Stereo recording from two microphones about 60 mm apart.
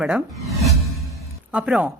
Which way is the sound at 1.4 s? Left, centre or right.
Centre.